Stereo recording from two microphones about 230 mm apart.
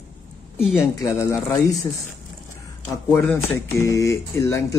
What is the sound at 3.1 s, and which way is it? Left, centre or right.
Speech, centre.